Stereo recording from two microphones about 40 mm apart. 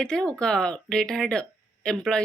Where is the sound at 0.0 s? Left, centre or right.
Centre.